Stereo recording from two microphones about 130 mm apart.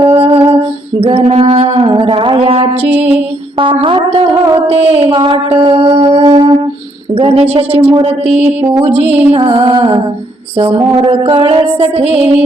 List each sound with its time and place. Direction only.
0.0 s music: 45° right (ahead or behind)
3.6 s speech: 40° right (ahead or behind)
4.7 s music: 50° right (ahead or behind)
9.3 s speech: 40° right (ahead or behind)
10.6 s music: 45° right (ahead or behind)